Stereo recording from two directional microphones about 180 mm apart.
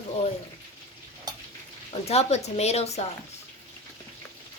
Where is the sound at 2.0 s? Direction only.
35° left (ahead or behind).